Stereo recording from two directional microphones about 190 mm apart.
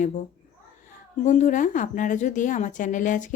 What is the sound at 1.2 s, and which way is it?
Speech, 40° left (ahead or behind).